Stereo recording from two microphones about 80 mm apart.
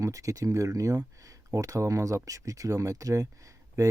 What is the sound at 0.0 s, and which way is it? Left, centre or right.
Speech, right.